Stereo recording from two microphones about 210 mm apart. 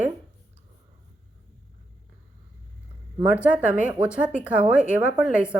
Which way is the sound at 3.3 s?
5° right (ahead or behind).